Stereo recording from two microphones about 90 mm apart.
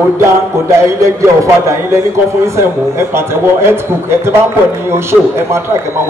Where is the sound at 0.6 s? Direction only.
30° right (ahead or behind).